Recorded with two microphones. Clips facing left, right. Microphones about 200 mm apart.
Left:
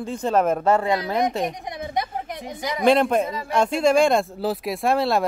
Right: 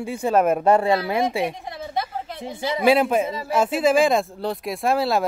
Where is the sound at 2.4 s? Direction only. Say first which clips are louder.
Right 5 dB; 25° right (ahead or behind).